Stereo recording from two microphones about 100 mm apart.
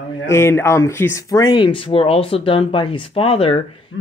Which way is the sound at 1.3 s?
50° left (ahead or behind).